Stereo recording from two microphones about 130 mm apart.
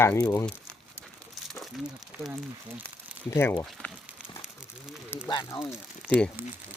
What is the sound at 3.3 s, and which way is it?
Speech, 20° left (ahead or behind).